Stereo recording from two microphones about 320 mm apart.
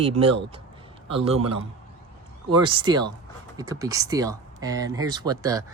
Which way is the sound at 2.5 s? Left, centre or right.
Centre.